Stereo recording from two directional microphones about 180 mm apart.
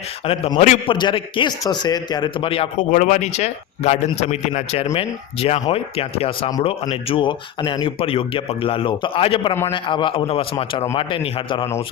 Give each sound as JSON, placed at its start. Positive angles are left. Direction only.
{"t": 0.3, "sound": "speech", "side_deg": 35}
{"t": 0.9, "sound": "a man's voice", "side_deg": 25}
{"t": 2.9, "sound": "a man's voice", "side_deg": 45}